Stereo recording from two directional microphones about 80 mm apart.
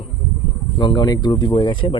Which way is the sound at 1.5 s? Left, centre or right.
Left.